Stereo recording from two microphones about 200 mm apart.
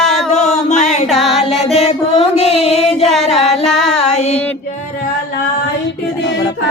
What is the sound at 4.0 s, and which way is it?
Female singing, 30° left (ahead or behind).